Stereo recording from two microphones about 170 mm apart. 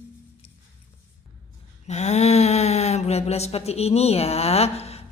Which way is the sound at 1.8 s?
40° left (ahead or behind).